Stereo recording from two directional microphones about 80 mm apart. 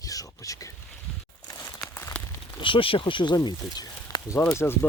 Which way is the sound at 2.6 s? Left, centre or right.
Left.